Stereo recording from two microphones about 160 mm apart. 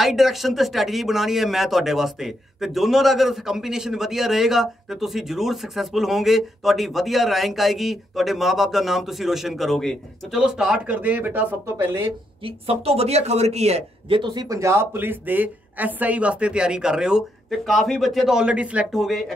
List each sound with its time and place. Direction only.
0.0 s a man's voice: centre (ahead or behind); by 12.1 s 15° right (ahead or behind)
12.4 s a man's voice: 40° right (ahead or behind); by 19.3 s centre (ahead or behind)